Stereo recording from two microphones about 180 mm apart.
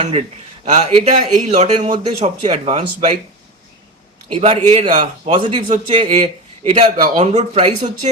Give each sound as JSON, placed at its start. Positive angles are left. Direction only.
{"t": 0.0, "sound": "speech", "side_deg": -30}
{"t": 4.3, "sound": "speech", "side_deg": -35}